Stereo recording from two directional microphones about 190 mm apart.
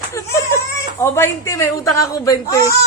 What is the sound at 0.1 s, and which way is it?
Speech, 15° left (ahead or behind).